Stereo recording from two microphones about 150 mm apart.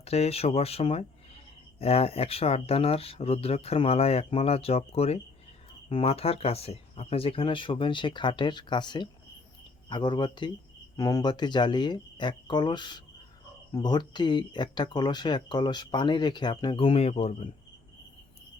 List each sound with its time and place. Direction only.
0.0 s speech: 45° left (ahead or behind)